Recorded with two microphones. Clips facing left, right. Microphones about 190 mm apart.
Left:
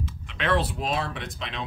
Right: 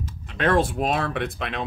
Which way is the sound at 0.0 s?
45° right (ahead or behind).